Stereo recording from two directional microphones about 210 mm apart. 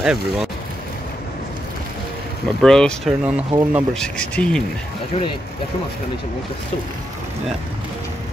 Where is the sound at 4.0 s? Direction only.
5° left (ahead or behind).